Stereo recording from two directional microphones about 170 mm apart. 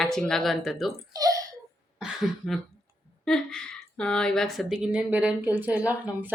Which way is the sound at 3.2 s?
5° left (ahead or behind).